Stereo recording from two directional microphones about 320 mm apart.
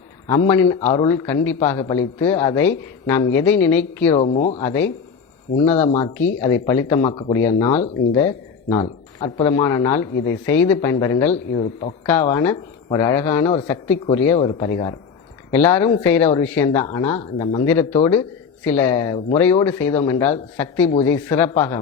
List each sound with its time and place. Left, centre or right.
0.3 s speech: centre
0.8 s speech: centre
1.0 s speech: centre
4.2 s speech: left
4.6 s speech: centre